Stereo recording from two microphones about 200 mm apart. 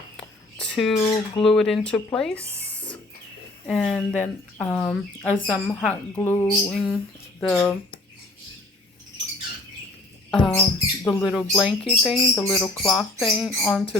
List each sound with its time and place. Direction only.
0.2 s a sound: 5° left (ahead or behind)
1.0 s speech: 15° left (ahead or behind)
1.5 s speech: centre (ahead or behind)
6.7 s speech: 5° right (ahead or behind)
10.3 s speech: 5° left (ahead or behind)